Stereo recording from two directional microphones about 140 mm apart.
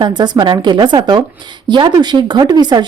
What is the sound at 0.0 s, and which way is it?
Speech, 30° right (ahead or behind).